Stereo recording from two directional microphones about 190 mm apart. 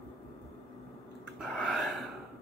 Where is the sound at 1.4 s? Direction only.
5° left (ahead or behind).